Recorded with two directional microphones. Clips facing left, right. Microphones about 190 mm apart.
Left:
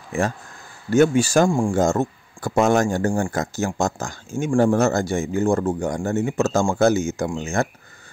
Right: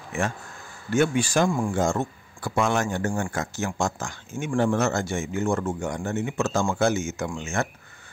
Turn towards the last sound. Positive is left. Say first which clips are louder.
# left 5 dB
turn(degrees=35)  # may be behind; listen again after turning